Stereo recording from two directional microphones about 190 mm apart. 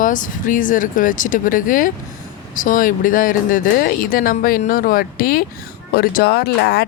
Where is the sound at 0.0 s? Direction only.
45° left (ahead or behind).